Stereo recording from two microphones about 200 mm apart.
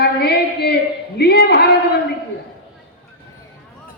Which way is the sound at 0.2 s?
55° left (ahead or behind).